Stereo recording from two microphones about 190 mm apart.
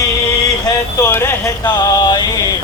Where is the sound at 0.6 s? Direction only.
15° left (ahead or behind).